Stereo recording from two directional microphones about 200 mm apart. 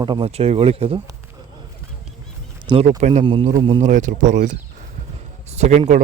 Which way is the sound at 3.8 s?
40° right (ahead or behind).